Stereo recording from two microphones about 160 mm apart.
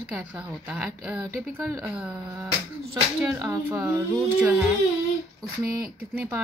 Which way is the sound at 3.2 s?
15° right (ahead or behind).